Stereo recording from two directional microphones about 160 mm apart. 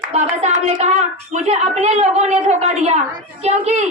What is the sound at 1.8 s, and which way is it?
A woman's voice, 40° right (ahead or behind).